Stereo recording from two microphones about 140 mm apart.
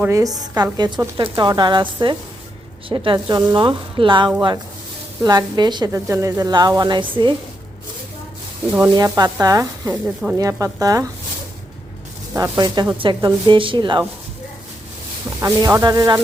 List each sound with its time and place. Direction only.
0.0 s a woman's voice: 25° right (ahead or behind)
9.0 s a woman's voice: 25° right (ahead or behind)
12.4 s a woman's voice: 30° right (ahead or behind)
15.4 s a woman's voice: 20° right (ahead or behind)